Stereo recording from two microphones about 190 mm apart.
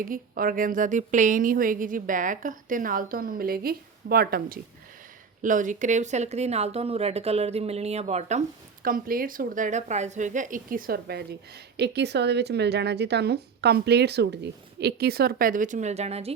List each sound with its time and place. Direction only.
0.0 s speech: 45° right (ahead or behind)